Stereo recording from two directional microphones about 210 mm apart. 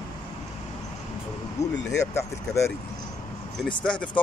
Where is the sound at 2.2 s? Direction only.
15° left (ahead or behind).